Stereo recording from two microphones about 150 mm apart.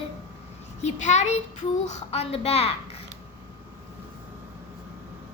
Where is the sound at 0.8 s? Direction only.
50° left (ahead or behind).